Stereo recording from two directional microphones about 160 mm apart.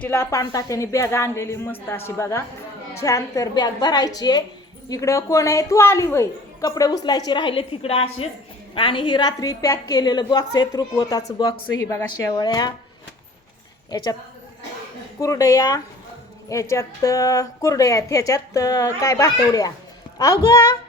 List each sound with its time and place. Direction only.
0.0 s a woman's voice: 15° left (ahead or behind)
15.2 s a woman's voice: 20° left (ahead or behind)